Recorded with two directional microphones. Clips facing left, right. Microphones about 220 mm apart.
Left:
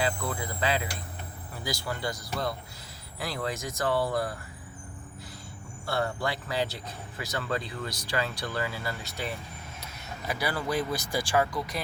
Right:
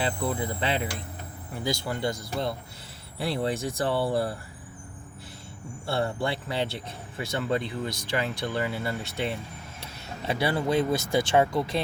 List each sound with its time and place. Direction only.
0.0 s speech: 25° right (ahead or behind)
5.8 s speech: 30° right (ahead or behind)